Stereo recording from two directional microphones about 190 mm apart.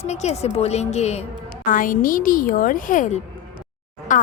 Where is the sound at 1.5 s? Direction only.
45° left (ahead or behind).